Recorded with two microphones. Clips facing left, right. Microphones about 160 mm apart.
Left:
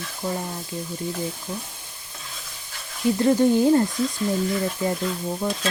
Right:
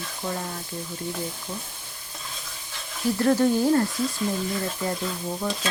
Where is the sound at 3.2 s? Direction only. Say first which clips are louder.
Left 2 dB; 15° left (ahead or behind).